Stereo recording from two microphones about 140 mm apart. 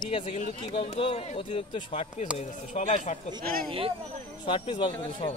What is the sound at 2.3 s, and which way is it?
Speech, 60° left (ahead or behind).